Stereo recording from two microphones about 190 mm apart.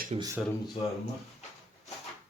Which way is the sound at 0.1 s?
30° right (ahead or behind).